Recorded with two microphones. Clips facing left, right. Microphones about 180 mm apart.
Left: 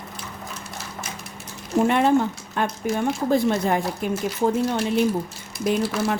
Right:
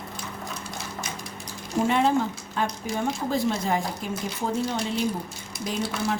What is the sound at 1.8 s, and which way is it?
Speech, 60° left (ahead or behind).